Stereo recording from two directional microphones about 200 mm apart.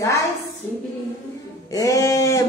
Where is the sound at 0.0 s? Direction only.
15° left (ahead or behind).